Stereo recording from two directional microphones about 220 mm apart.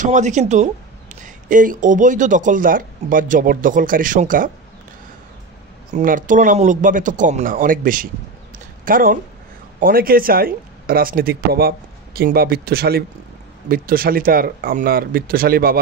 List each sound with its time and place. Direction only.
0.0 s speech: 35° right (ahead or behind)
5.9 s speech: 35° right (ahead or behind)